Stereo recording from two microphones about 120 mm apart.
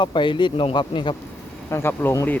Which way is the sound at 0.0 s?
40° left (ahead or behind).